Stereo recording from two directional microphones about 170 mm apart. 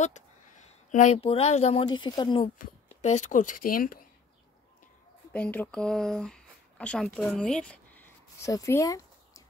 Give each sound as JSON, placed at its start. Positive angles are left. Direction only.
{"t": 0.7, "sound": "speech", "side_deg": 40}
{"t": 1.9, "sound": "speech", "side_deg": 25}
{"t": 2.6, "sound": "speech", "side_deg": 45}
{"t": 5.3, "sound": "speech", "side_deg": 10}